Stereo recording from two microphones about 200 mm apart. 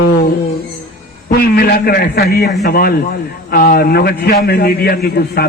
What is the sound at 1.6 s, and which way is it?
A man's voice, 50° left (ahead or behind).